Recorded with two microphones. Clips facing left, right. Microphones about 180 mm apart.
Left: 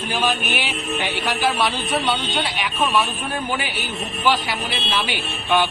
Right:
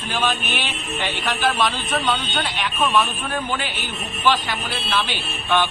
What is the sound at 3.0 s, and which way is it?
Speech, 15° left (ahead or behind).